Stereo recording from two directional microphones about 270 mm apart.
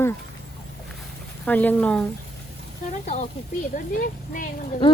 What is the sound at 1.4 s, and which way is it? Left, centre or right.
Speech, centre.